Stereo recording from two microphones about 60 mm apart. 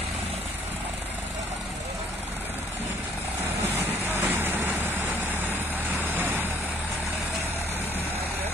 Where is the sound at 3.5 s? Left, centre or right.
Right.